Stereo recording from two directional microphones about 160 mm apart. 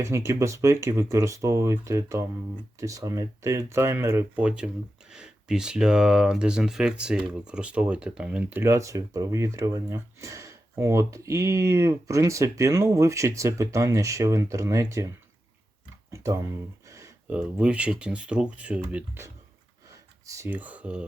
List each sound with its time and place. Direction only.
0.0 s speech: 20° right (ahead or behind)
16.1 s a sound: 20° right (ahead or behind)
17.3 s speech: 5° right (ahead or behind)
20.2 s speech: 20° right (ahead or behind)